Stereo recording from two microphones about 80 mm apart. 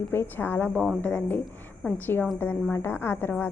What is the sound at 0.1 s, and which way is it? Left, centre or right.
A woman's voice, left.